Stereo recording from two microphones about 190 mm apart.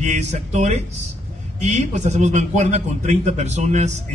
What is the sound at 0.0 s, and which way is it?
A man's voice, 35° right (ahead or behind).